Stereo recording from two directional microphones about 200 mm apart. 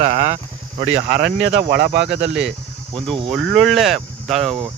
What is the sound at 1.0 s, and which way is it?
Speech, 55° right (ahead or behind).